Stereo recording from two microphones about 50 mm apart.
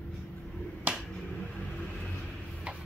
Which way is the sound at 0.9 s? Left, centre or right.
Right.